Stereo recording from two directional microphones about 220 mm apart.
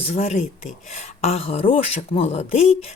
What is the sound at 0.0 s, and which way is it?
A woman's voice, 30° left (ahead or behind).